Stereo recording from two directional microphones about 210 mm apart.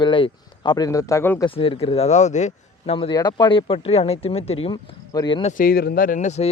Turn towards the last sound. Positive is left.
turn(degrees=35)  # may be behind; listen again after turning